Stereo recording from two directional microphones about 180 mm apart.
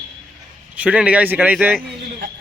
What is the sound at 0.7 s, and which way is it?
Speech, 5° right (ahead or behind).